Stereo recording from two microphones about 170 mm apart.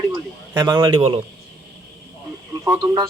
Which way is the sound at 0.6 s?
20° right (ahead or behind).